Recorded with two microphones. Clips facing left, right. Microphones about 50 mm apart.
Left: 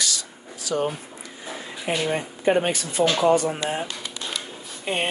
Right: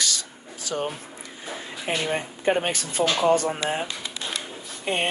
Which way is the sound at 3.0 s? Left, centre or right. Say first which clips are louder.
Left 2 dB; left.